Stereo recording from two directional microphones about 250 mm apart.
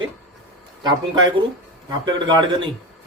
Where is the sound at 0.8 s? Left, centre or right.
Centre.